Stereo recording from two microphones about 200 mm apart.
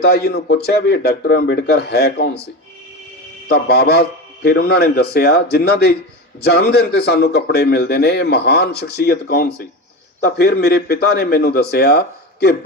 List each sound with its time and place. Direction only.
0.0 s a man's voice: 55° left (ahead or behind)
3.5 s a man's voice: 55° left (ahead or behind)